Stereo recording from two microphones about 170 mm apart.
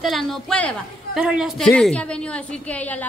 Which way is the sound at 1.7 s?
5° left (ahead or behind).